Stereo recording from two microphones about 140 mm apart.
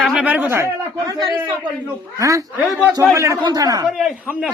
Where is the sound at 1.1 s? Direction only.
25° right (ahead or behind).